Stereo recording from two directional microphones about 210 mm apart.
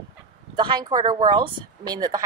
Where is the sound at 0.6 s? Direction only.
20° right (ahead or behind).